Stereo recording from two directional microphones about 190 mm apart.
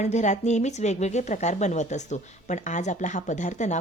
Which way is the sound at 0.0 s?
35° left (ahead or behind).